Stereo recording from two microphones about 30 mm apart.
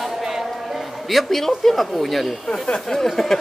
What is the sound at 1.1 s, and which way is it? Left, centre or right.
Speech, centre.